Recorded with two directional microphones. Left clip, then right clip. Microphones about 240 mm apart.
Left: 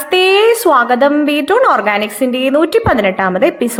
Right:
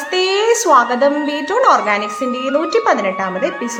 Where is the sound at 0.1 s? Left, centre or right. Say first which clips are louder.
Left 5 dB; left.